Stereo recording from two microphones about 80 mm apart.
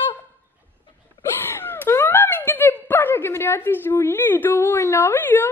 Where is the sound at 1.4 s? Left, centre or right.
Left.